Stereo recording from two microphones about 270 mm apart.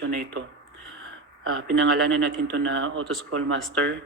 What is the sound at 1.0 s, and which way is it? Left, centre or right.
Speech, right.